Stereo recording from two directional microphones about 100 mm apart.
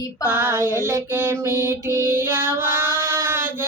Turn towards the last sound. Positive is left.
turn(degrees=-25)  # may be behind; listen again after turning